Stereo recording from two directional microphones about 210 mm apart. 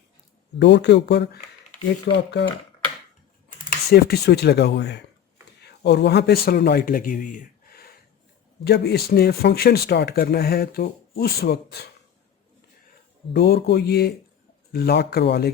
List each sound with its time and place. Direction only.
0.6 s speech: 55° left (ahead or behind)
3.7 s speech: 50° left (ahead or behind)
13.3 s speech: 50° left (ahead or behind)